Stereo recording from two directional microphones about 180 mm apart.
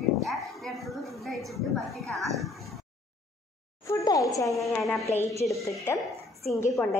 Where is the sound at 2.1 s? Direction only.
Centre (ahead or behind).